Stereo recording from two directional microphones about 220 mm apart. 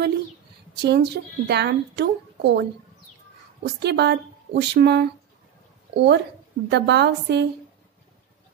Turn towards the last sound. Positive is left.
turn(degrees=-50)  # may be behind; listen again after turning